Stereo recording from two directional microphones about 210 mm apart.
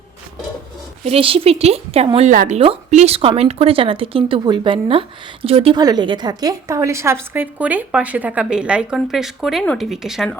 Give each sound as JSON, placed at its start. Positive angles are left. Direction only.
{"t": 1.0, "sound": "a woman's voice", "side_deg": -25}